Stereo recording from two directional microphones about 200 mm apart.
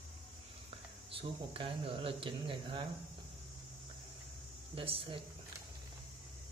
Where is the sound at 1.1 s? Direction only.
25° right (ahead or behind).